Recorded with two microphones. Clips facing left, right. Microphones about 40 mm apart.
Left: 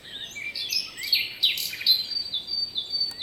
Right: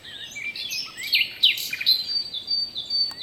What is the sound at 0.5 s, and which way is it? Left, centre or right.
Chirp, right.